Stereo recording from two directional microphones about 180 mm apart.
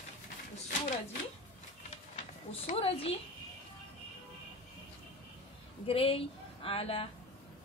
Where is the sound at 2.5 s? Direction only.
35° left (ahead or behind).